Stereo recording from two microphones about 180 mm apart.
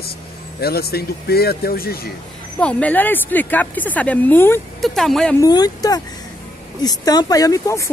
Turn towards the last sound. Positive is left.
turn(degrees=15)  # may be behind; listen again after turning